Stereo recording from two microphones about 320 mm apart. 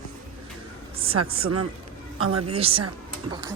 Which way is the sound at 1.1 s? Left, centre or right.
Right.